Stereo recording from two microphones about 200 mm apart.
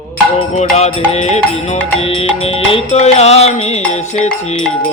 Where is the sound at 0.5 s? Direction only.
35° left (ahead or behind).